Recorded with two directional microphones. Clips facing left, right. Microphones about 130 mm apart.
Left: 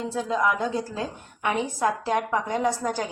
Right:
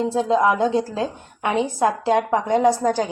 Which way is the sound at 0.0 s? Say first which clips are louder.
Right 7 dB; 25° right (ahead or behind).